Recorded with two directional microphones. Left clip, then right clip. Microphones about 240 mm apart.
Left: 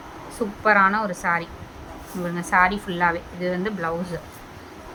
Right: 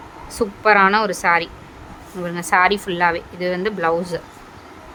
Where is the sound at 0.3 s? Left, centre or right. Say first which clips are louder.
Right 4 dB; right.